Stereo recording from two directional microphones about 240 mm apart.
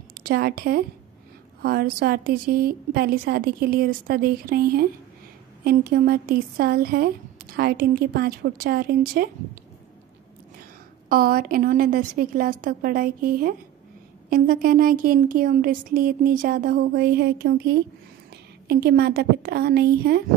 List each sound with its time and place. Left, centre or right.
0.2 s a woman's voice: right
11.1 s a woman's voice: right